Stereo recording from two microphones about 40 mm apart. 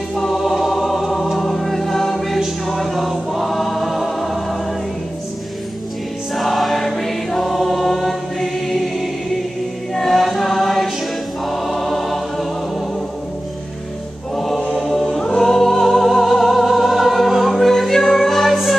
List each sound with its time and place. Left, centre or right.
0.1 s music: centre
2.6 s choir: centre
6.3 s choir: centre
9.9 s chant: centre
11.4 s choir: centre
15.1 s music: centre